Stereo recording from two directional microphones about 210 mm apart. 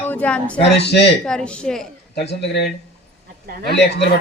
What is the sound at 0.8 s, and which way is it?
Speech, 55° left (ahead or behind).